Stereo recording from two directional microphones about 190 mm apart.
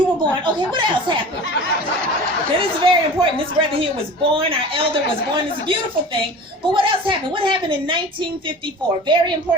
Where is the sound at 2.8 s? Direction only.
25° right (ahead or behind).